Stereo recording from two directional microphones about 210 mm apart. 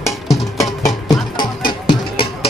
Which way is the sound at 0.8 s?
20° left (ahead or behind).